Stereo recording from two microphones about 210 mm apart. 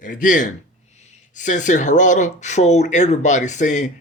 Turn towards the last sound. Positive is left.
turn(degrees=35)  # may be behind; listen again after turning